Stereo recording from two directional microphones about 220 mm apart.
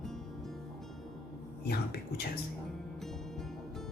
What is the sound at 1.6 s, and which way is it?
Speech, 45° left (ahead or behind).